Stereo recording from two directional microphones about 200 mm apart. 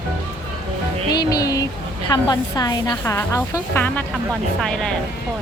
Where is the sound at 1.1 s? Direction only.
20° left (ahead or behind).